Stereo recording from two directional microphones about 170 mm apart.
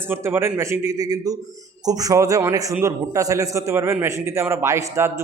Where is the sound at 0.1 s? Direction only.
15° right (ahead or behind).